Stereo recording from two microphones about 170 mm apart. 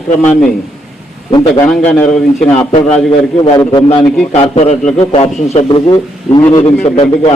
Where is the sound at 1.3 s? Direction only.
30° left (ahead or behind).